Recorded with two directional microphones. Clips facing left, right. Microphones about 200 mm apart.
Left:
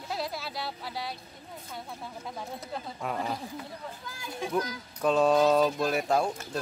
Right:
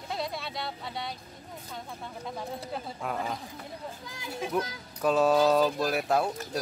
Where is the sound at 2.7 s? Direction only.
Centre (ahead or behind).